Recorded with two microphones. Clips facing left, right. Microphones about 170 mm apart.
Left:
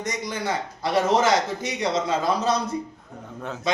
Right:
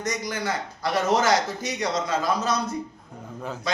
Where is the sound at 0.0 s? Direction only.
25° left (ahead or behind).